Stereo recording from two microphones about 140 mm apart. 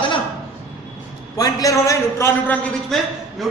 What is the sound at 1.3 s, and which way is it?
A man's voice, 25° left (ahead or behind).